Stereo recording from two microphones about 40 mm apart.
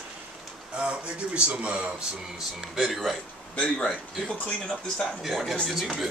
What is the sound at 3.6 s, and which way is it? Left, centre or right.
Speech, centre.